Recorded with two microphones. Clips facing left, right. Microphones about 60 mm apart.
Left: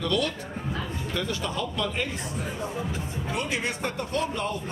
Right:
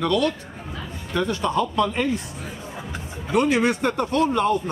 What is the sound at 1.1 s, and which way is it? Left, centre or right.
Speech, right.